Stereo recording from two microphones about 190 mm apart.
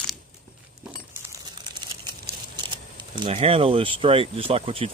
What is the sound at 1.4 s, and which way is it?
Typing, 20° right (ahead or behind).